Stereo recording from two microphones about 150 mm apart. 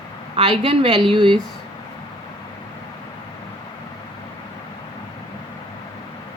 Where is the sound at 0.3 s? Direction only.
35° right (ahead or behind).